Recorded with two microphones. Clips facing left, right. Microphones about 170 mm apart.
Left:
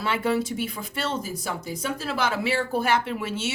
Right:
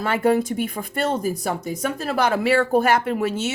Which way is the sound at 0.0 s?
50° right (ahead or behind).